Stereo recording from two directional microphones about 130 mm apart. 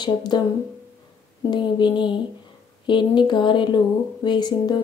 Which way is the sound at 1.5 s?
35° left (ahead or behind).